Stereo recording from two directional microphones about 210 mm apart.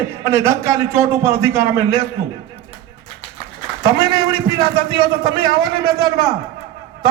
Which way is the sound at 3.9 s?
20° right (ahead or behind).